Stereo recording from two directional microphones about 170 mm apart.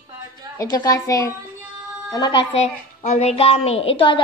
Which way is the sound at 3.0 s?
40° left (ahead or behind).